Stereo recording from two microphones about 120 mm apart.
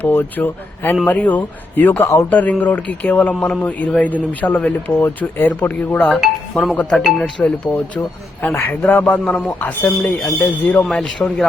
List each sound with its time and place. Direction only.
0.0 s speech: 15° left (ahead or behind)
6.0 s speech: centre (ahead or behind)